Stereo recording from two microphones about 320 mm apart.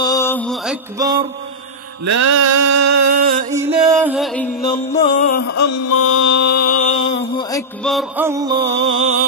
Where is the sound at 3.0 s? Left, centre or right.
Right.